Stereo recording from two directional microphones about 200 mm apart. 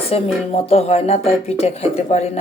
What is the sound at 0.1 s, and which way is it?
Speech, 30° left (ahead or behind).